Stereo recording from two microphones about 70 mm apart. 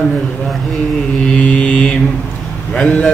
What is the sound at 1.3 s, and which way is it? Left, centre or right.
Mantra, centre.